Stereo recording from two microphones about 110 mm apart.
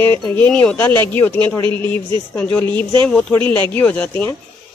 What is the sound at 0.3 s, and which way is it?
A man's voice, 15° left (ahead or behind).